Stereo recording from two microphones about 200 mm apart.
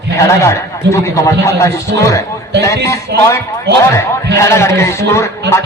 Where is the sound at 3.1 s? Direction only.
55° right (ahead or behind).